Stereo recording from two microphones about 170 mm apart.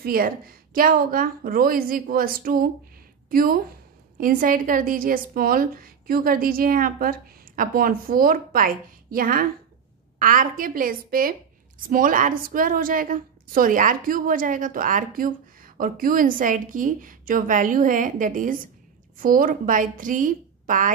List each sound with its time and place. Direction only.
0.0 s a woman's voice: 60° right (ahead or behind)